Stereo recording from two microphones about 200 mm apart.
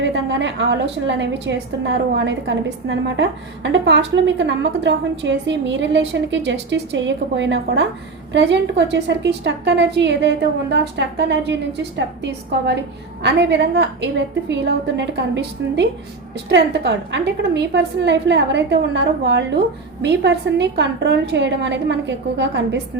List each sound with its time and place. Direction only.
0.0 s a woman's voice: 65° right (ahead or behind)